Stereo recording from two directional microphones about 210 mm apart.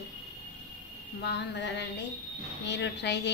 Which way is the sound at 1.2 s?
55° left (ahead or behind).